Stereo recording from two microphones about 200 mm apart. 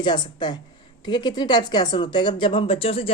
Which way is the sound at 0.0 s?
20° left (ahead or behind).